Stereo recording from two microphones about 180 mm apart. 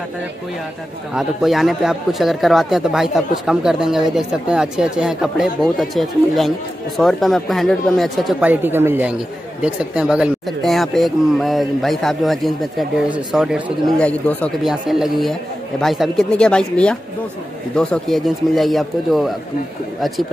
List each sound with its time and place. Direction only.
1.1 s speech: centre (ahead or behind)